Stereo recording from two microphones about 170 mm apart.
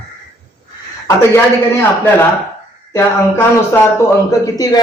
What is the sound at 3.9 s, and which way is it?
Speech, 20° left (ahead or behind).